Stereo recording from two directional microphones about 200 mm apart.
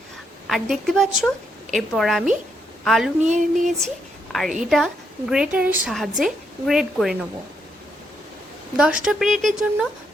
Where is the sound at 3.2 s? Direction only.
35° right (ahead or behind).